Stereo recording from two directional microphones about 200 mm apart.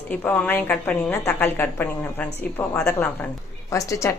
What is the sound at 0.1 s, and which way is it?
A woman's voice, 10° left (ahead or behind).